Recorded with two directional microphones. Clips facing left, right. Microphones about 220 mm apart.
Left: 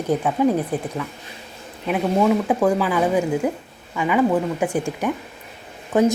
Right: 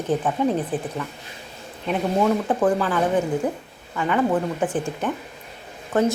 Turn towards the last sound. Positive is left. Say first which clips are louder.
# left 3 dB
turn(degrees=15)  # may be behind; listen again after turning